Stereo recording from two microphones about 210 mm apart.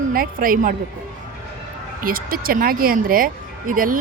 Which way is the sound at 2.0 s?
45° right (ahead or behind).